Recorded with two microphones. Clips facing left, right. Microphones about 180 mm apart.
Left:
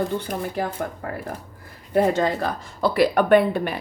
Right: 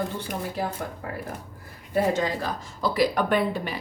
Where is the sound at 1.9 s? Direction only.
60° left (ahead or behind).